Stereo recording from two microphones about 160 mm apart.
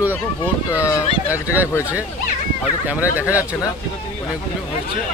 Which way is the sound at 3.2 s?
20° left (ahead or behind).